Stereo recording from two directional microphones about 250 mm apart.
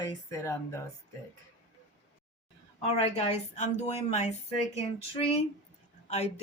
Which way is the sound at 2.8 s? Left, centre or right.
Left.